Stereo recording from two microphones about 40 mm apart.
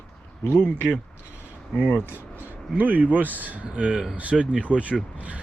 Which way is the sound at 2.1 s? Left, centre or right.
Right.